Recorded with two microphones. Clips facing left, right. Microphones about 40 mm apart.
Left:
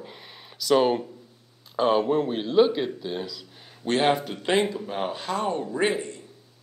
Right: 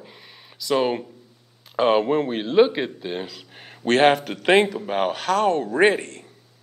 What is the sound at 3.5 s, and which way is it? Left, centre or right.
A man's voice, right.